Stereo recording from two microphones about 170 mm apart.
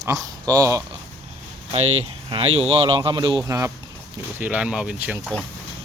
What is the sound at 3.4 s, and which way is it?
Speech, 15° right (ahead or behind).